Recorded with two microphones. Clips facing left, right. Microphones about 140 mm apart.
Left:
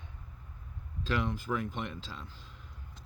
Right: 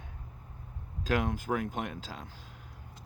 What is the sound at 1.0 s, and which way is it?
Speech, 50° right (ahead or behind).